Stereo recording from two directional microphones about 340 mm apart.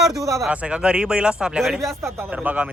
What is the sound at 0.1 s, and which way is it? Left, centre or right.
Speech, centre.